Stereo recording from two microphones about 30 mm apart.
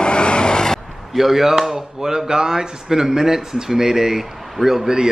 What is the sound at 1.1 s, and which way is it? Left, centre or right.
Speech, centre.